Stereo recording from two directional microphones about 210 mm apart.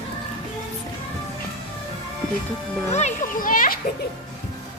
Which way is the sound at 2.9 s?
35° left (ahead or behind).